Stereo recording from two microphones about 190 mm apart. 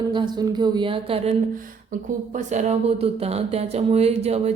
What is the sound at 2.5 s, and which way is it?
Speech, 35° right (ahead or behind).